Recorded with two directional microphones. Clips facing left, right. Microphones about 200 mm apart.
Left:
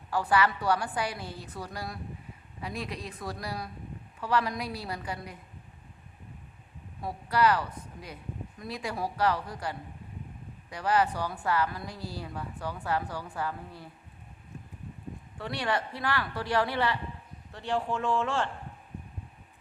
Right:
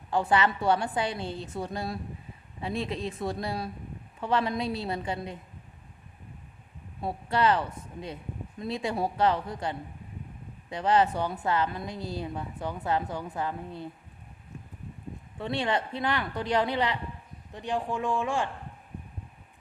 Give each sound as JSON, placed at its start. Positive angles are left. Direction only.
{"t": 0.1, "sound": "a woman's voice", "side_deg": -25}
{"t": 7.0, "sound": "a woman's voice", "side_deg": -25}
{"t": 15.4, "sound": "a woman's voice", "side_deg": -20}